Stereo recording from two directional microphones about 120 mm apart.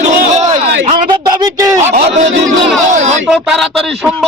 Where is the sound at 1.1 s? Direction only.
35° right (ahead or behind).